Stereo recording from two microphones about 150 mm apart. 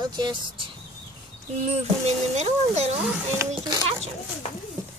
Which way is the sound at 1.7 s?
45° right (ahead or behind).